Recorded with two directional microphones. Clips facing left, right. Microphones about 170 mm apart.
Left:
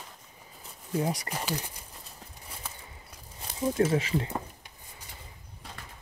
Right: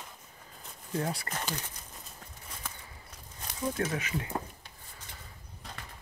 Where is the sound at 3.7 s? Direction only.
30° left (ahead or behind).